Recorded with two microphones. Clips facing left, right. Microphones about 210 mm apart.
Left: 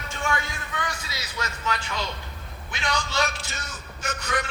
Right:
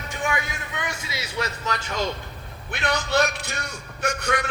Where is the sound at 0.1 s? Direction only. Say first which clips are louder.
Right 1 dB; 15° right (ahead or behind).